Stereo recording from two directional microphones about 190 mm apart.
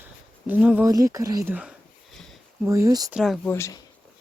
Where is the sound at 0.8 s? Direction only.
15° right (ahead or behind).